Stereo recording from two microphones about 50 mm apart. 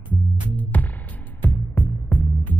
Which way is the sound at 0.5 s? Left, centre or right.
Left.